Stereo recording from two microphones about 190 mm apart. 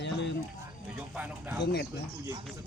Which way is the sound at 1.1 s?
5° right (ahead or behind).